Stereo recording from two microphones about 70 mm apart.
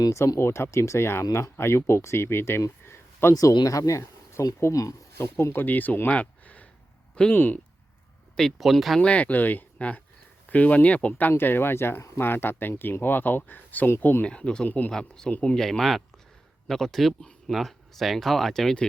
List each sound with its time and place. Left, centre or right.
0.3 s speech: left
2.8 s a sound: left
3.3 s speech: left
5.1 s speech: left
8.4 s speech: centre
9.0 s speech: centre
14.3 s speech: centre
15.3 s speech: centre
15.5 s speech: centre